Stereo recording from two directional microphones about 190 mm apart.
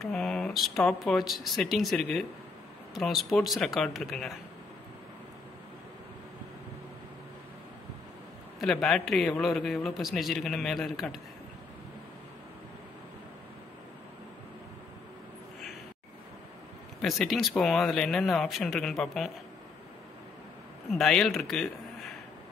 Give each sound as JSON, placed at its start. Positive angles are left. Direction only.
{"t": 0.0, "sound": "speech", "side_deg": 5}
{"t": 8.5, "sound": "speech", "side_deg": 0}
{"t": 17.0, "sound": "speech", "side_deg": 0}
{"t": 20.9, "sound": "speech", "side_deg": 0}